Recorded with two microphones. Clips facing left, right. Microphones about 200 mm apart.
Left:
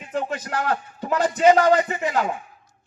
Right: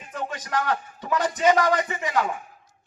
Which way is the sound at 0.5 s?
30° left (ahead or behind).